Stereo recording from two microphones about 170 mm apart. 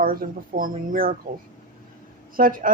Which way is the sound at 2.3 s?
55° right (ahead or behind).